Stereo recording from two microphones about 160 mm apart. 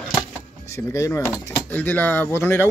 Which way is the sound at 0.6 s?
20° left (ahead or behind).